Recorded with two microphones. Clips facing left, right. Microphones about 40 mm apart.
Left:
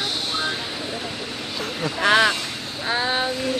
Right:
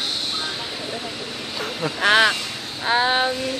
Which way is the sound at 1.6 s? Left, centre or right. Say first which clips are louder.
Right 1 dB; centre.